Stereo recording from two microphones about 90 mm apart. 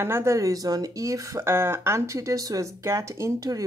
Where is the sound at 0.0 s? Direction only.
30° right (ahead or behind).